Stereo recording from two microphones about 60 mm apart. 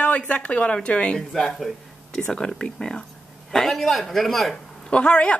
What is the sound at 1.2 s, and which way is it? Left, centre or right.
A man's voice, centre.